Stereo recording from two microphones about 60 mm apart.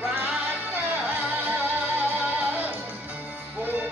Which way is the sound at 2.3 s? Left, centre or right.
Right.